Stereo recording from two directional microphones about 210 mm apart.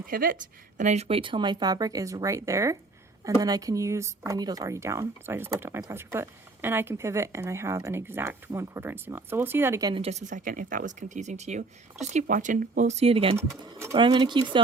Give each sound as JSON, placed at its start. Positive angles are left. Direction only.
{"t": 0.1, "sound": "a woman's voice", "side_deg": -45}
{"t": 0.8, "sound": "speech", "side_deg": -30}
{"t": 9.9, "sound": "speech", "side_deg": -30}
{"t": 13.3, "sound": "speech", "side_deg": -15}